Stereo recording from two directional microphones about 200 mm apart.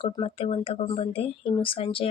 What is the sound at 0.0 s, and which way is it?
Speech, 25° left (ahead or behind).